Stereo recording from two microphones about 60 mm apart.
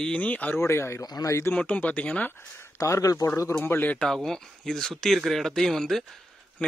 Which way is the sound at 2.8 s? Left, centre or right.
Left.